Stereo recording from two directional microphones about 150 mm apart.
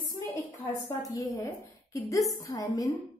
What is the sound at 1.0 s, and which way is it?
A woman's voice, 20° left (ahead or behind).